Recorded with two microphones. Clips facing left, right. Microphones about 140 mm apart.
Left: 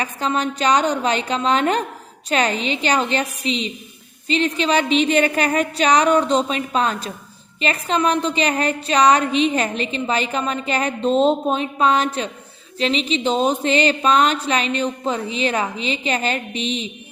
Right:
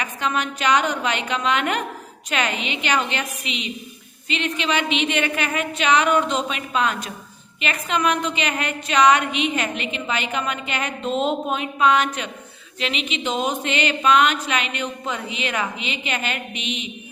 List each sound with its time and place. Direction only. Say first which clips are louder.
0.0 s a woman's voice: left 3 dB; 35° left (ahead or behind)